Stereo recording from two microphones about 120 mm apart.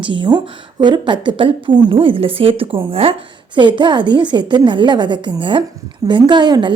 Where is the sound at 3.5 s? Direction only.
40° right (ahead or behind).